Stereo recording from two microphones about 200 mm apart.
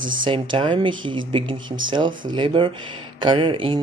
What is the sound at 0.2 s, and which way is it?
Speech, 25° right (ahead or behind).